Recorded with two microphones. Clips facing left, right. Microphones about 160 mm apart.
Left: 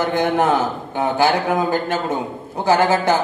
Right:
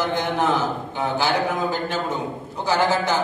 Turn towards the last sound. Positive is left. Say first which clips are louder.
# left 5 dB
turn(degrees=55)  # may be behind; listen again after turning